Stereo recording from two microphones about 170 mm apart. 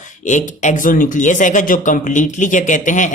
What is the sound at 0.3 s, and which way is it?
Speech, 45° left (ahead or behind).